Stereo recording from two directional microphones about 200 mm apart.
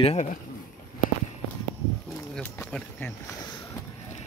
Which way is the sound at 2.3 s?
5° left (ahead or behind).